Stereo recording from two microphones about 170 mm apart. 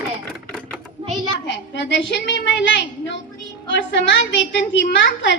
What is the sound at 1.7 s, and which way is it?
A woman's voice, 90° left.